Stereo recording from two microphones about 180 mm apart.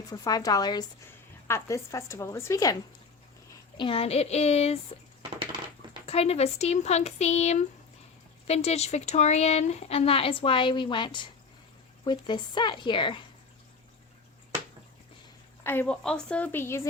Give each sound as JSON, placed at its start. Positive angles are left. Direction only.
{"t": 0.1, "sound": "a woman's voice", "side_deg": 20}
{"t": 3.8, "sound": "speech", "side_deg": 30}
{"t": 5.4, "sound": "crushing", "side_deg": -30}
{"t": 6.1, "sound": "speech", "side_deg": 35}
{"t": 15.6, "sound": "a woman's voice", "side_deg": 10}